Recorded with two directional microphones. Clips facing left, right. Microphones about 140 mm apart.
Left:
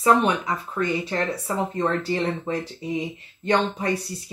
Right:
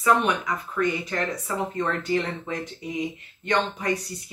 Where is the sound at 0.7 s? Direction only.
30° left (ahead or behind).